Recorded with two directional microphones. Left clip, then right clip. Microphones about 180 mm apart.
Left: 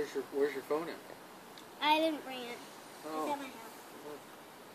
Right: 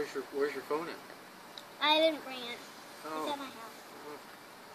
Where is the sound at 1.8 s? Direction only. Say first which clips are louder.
Right 3 dB; 5° right (ahead or behind).